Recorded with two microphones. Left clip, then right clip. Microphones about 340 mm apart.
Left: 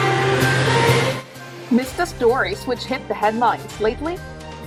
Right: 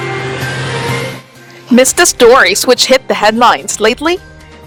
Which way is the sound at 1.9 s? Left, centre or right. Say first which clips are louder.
Right 12 dB; right.